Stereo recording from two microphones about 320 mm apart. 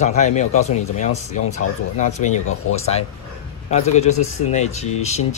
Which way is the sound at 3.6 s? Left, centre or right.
Left.